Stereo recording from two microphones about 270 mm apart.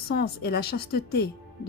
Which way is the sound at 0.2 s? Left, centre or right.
Left.